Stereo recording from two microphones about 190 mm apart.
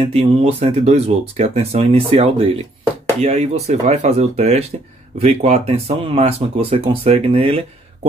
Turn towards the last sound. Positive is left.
turn(degrees=-30)  # may be behind; listen again after turning